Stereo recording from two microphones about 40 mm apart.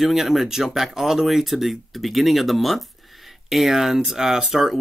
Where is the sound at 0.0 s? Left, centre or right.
Centre.